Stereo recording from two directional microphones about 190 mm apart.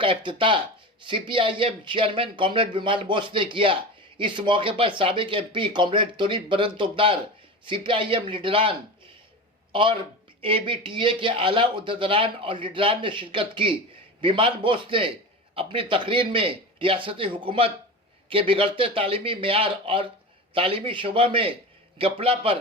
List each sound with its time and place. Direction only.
0.0 s speech: 25° right (ahead or behind)
9.7 s speech: 25° right (ahead or behind)